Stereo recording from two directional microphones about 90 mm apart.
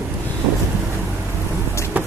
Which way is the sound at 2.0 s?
20° right (ahead or behind).